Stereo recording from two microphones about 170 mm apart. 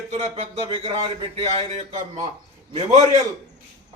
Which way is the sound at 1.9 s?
45° right (ahead or behind).